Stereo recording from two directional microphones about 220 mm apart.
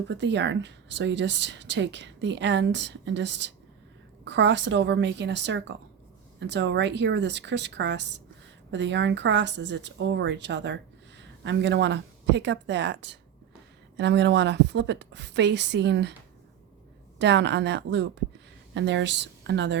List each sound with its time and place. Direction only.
0.1 s a woman's voice: 55° right (ahead or behind)
17.2 s a woman's voice: 50° right (ahead or behind)